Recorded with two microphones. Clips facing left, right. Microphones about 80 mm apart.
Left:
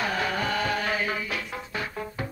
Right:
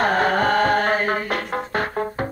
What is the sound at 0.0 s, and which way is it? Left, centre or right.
Music, right.